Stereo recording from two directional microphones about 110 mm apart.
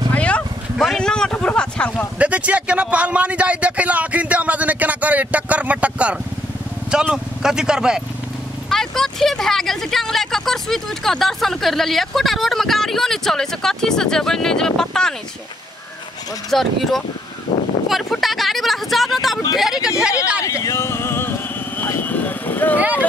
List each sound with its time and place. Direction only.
0.1 s a sound: 10° left (ahead or behind)
0.8 s speech: 5° left (ahead or behind)
2.1 s speech: 10° right (ahead or behind); by 15.1 s 5° left (ahead or behind)
16.4 s speech: centre (ahead or behind)
20.4 s vehicle: 30° left (ahead or behind)